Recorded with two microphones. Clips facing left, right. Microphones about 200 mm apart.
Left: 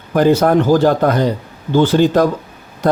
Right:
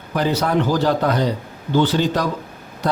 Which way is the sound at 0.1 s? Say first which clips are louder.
Left 8 dB; 50° left (ahead or behind).